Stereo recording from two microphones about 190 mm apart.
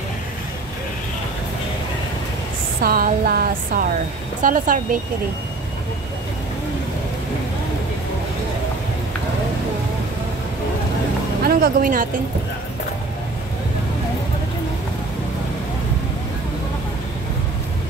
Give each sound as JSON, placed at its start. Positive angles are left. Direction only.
{"t": 2.8, "sound": "speech", "side_deg": -50}
{"t": 11.4, "sound": "speech", "side_deg": -50}